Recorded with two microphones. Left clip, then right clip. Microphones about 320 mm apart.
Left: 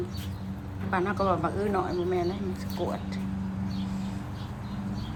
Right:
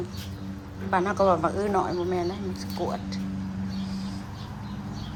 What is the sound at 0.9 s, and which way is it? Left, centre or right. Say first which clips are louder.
Speech: right 5 dB; centre.